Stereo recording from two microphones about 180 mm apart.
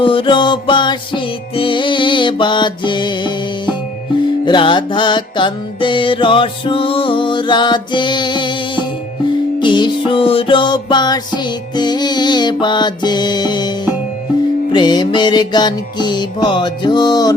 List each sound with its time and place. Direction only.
0.0 s music: 30° left (ahead or behind)